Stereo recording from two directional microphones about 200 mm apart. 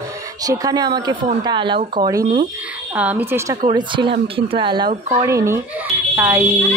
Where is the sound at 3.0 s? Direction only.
10° right (ahead or behind).